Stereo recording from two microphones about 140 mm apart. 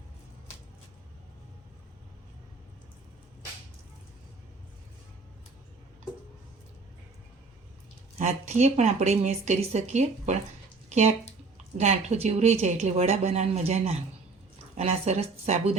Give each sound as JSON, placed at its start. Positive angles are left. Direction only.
{"t": 8.2, "sound": "a woman's voice", "side_deg": -55}
{"t": 10.8, "sound": "a sound", "side_deg": -55}
{"t": 11.8, "sound": "speech", "side_deg": -50}